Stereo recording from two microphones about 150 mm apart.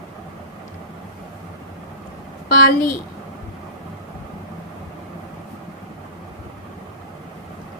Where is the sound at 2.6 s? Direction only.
65° left (ahead or behind).